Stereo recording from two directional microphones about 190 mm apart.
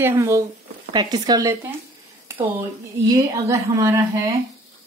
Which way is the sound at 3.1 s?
15° right (ahead or behind).